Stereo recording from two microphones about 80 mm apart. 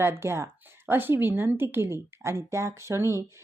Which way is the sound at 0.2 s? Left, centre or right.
Right.